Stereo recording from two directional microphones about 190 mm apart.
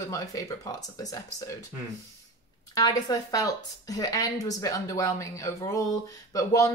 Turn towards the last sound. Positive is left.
turn(degrees=15)  # may be behind; listen again after turning